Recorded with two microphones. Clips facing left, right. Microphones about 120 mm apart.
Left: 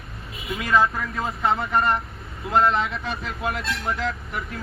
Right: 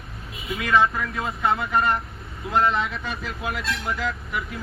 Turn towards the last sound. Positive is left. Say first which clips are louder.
# right 1 dB
turn(degrees=0)  # may be behind; listen again after turning